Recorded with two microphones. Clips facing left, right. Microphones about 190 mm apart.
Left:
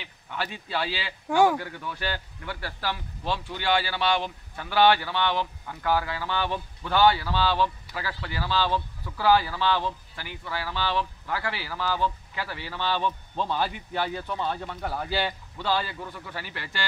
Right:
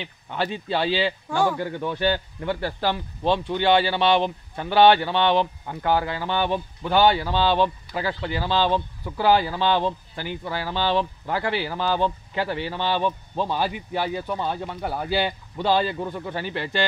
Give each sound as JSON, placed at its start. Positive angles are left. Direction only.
{"t": 0.0, "sound": "speech", "side_deg": -25}